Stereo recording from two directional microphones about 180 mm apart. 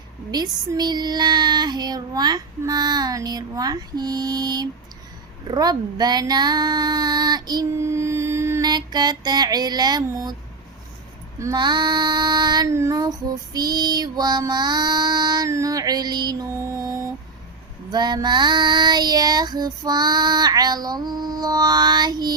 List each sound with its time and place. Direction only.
0.3 s female singing: 20° right (ahead or behind)
5.5 s speech: 20° right (ahead or behind)
11.3 s female singing: 20° right (ahead or behind)